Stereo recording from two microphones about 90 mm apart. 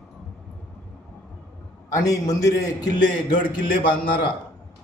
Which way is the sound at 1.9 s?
40° left (ahead or behind).